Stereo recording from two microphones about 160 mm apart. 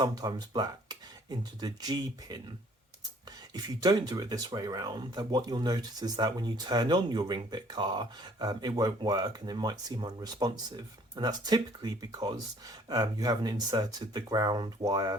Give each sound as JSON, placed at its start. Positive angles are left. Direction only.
{"t": 0.0, "sound": "speech", "side_deg": -25}
{"t": 3.5, "sound": "speech", "side_deg": -25}